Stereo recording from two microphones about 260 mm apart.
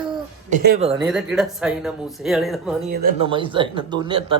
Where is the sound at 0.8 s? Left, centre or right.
Right.